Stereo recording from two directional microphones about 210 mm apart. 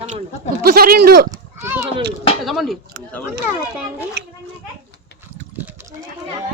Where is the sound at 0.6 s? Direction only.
45° right (ahead or behind).